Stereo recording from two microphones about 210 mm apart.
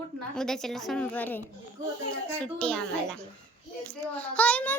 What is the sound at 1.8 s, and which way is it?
Speech, 40° right (ahead or behind).